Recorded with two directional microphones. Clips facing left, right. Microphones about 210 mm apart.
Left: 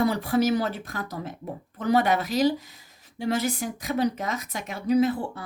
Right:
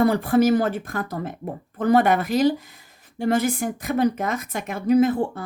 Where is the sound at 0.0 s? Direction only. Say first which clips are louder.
Right 5 dB; 55° right (ahead or behind).